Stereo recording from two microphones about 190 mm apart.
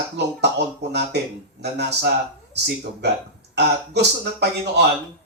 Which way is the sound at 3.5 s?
60° right (ahead or behind).